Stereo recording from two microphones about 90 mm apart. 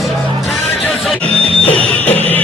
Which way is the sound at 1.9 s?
20° left (ahead or behind).